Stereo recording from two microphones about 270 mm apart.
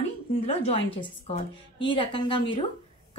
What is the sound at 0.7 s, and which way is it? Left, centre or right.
Speech, left.